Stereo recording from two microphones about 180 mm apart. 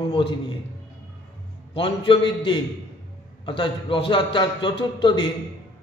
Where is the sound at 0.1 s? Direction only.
30° left (ahead or behind).